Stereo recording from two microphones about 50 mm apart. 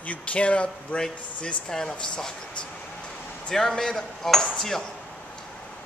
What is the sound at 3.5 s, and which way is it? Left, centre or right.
Speech, centre.